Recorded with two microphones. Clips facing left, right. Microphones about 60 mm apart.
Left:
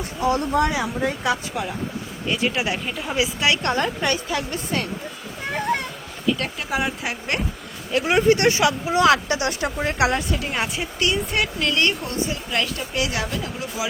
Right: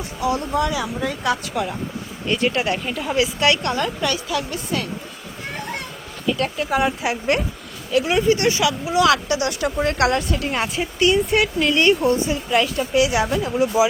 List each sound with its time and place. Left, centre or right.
0.2 s speech: left
1.2 s speech: left
2.2 s speech: centre
3.2 s speech: centre
3.6 s speech: left
6.2 s speech: centre
7.9 s speech: left
8.3 s speech: left
9.8 s speech: centre
10.3 s speech: centre
11.7 s a woman's voice: centre
13.2 s speech: right